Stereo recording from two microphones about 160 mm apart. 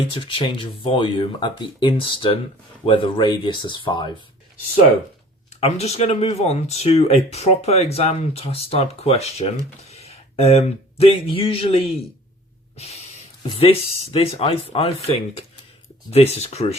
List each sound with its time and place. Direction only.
0.1 s speech: 35° left (ahead or behind)
5.6 s speech: 40° left (ahead or behind)
12.7 s a sound: 40° left (ahead or behind)
13.5 s speech: 35° left (ahead or behind)